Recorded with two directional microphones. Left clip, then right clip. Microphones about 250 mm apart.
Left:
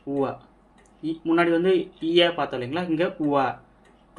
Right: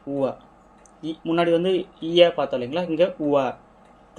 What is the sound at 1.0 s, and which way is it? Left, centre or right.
Speech, right.